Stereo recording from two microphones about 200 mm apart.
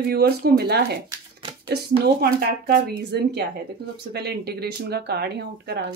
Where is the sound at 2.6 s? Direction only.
55° right (ahead or behind).